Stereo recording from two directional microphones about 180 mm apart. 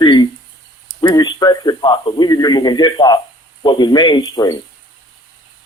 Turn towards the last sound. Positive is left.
turn(degrees=20)  # may be behind; listen again after turning